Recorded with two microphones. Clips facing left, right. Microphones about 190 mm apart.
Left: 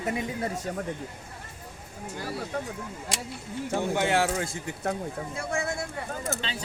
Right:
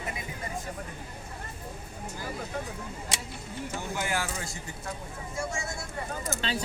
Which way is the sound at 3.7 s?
70° left (ahead or behind).